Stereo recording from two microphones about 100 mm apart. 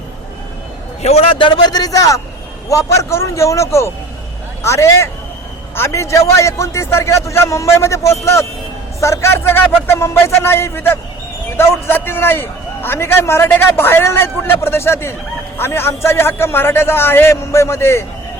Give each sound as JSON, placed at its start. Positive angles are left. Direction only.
{"t": 1.0, "sound": "a man's voice", "side_deg": 80}